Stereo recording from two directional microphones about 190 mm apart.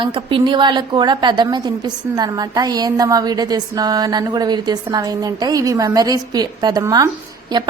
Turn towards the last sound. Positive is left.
turn(degrees=-25)  # may be behind; listen again after turning